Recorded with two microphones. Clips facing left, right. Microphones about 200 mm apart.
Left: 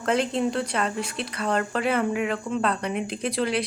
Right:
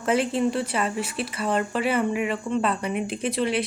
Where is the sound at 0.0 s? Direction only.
5° right (ahead or behind).